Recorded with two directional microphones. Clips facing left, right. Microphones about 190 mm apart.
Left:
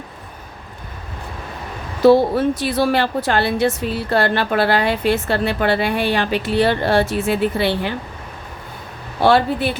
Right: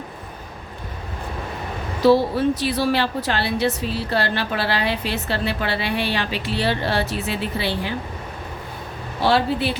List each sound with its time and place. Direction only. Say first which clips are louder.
2.0 s a woman's voice: left 4 dB; 50° left (ahead or behind)
9.2 s a woman's voice: left 4 dB; 55° left (ahead or behind)